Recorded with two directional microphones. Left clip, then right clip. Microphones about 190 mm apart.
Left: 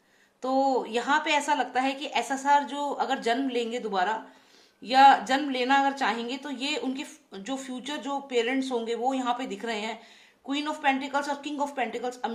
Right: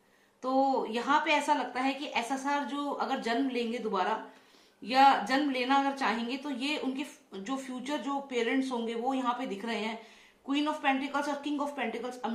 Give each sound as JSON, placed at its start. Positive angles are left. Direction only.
{"t": 0.4, "sound": "a woman's voice", "side_deg": 45}